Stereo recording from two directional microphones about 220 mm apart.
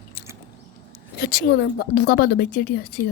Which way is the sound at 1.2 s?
50° left (ahead or behind).